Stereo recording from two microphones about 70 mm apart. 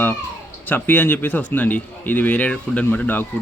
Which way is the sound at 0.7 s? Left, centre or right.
Left.